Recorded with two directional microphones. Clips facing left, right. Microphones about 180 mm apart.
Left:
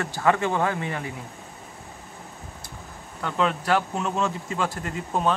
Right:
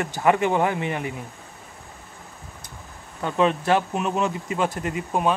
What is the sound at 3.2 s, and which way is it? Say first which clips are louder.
Speech: right 4 dB; 20° right (ahead or behind).